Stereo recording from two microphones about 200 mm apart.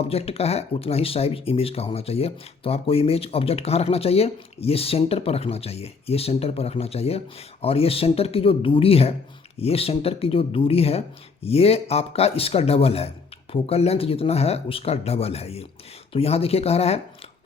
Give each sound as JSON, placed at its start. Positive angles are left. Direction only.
{"t": 0.1, "sound": "speech", "side_deg": 30}